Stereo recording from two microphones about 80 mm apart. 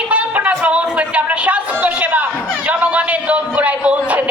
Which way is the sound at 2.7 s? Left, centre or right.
Centre.